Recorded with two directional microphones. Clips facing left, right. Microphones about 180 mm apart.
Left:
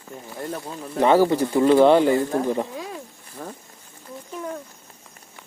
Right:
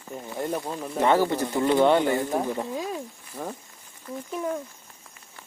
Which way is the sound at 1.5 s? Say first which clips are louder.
Left 5 dB; 25° left (ahead or behind).